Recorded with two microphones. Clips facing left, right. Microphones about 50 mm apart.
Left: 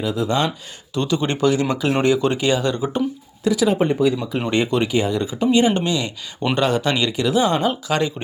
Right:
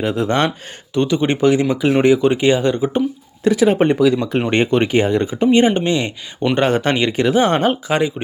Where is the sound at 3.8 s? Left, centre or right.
Right.